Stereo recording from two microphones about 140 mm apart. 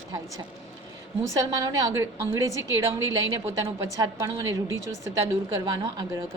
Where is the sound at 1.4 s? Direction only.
25° right (ahead or behind).